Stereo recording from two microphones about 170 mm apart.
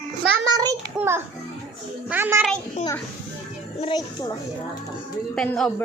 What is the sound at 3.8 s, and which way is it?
Speech, 30° left (ahead or behind).